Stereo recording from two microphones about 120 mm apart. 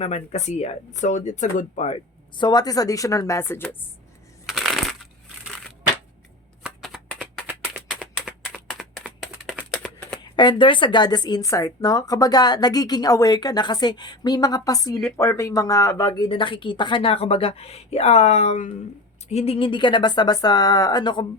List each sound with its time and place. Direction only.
0.0 s speech: 70° left (ahead or behind)
2.4 s speech: 35° left (ahead or behind); by 3.8 s 20° left (ahead or behind)
4.4 s shuffling cards: centre (ahead or behind)
6.6 s shuffling cards: 5° right (ahead or behind)
7.2 s a sound: 10° right (ahead or behind)
9.7 s a sound: 5° left (ahead or behind)
10.2 s speech: 40° left (ahead or behind)
16.3 s a woman's voice: 45° left (ahead or behind); by 18.7 s 75° left (ahead or behind)
19.3 s speech: 60° left (ahead or behind); by 21.2 s 40° left (ahead or behind)